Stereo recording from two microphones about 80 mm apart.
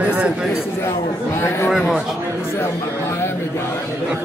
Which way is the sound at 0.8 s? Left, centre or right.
Left.